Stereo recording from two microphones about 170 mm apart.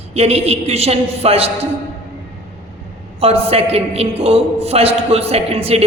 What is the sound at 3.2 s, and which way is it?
A man's voice, 35° right (ahead or behind).